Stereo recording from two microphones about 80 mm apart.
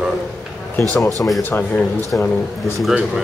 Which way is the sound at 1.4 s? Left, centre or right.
Left.